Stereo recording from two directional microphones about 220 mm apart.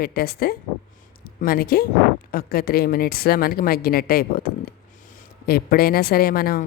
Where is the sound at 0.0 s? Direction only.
45° left (ahead or behind).